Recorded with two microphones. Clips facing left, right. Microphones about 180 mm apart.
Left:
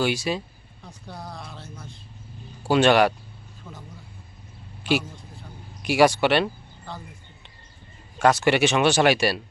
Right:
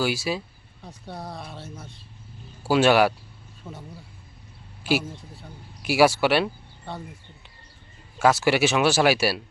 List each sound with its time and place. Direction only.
0.0 s speech: 5° right (ahead or behind)
1.0 s music: 25° right (ahead or behind)
2.6 s speech: 5° right (ahead or behind)
3.6 s music: 20° right (ahead or behind)
4.8 s a sound: 5° right (ahead or behind)
5.8 s speech: 5° right (ahead or behind)
8.2 s speech: 5° right (ahead or behind)